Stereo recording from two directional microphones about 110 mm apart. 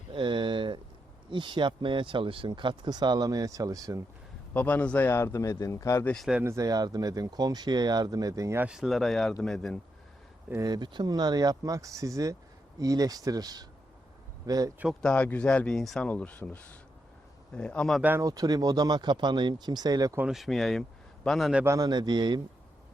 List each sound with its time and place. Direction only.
0.1 s speech: 50° right (ahead or behind); by 4.0 s 30° right (ahead or behind)
4.5 s a man's voice: 15° left (ahead or behind); by 6.1 s 30° left (ahead or behind)
6.4 s speech: 30° right (ahead or behind)
8.6 s speech: 5° right (ahead or behind)
10.5 s speech: 35° right (ahead or behind)
15.0 s speech: 10° left (ahead or behind)
18.2 s speech: 35° right (ahead or behind)
20.2 s speech: centre (ahead or behind)
21.8 s speech: 40° right (ahead or behind)